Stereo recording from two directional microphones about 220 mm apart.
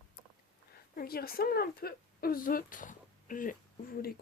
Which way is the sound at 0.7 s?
45° left (ahead or behind).